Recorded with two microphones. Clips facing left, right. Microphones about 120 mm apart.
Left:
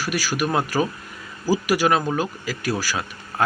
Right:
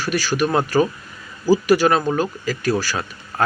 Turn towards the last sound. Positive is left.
turn(degrees=10)  # may be behind; listen again after turning